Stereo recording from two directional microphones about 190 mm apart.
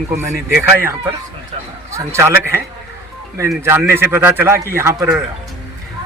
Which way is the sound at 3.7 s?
10° right (ahead or behind).